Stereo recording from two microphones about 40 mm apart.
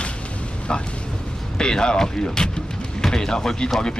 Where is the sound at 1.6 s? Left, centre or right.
Centre.